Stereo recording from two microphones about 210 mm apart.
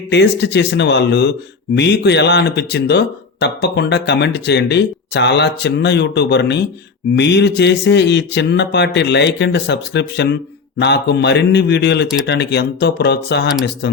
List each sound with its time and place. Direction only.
0.1 s speech: 55° left (ahead or behind)